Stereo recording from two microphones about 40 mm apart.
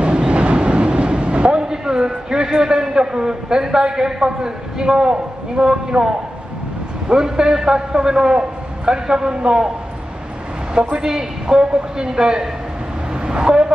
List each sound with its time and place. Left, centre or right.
0.0 s train: right
7.1 s a man's voice: centre
11.0 s a man's voice: centre